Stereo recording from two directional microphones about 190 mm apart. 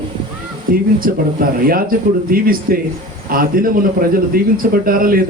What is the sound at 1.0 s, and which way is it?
Speech, 50° right (ahead or behind).